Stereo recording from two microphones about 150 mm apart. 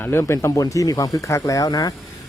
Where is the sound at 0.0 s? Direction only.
15° left (ahead or behind).